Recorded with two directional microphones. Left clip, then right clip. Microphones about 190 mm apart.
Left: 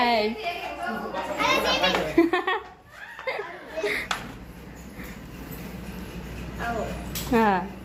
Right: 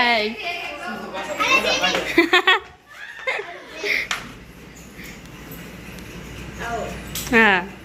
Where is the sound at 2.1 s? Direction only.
10° left (ahead or behind).